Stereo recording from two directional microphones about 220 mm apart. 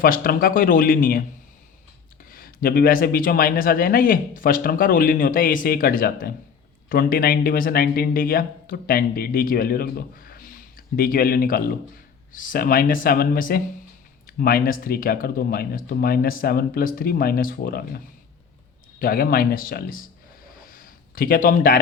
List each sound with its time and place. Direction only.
0.0 s speech: 40° left (ahead or behind)
2.3 s speech: 40° left (ahead or behind)
20.7 s a sound: 40° left (ahead or behind)